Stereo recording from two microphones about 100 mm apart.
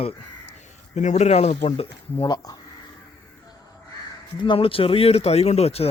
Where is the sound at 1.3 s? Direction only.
90° left.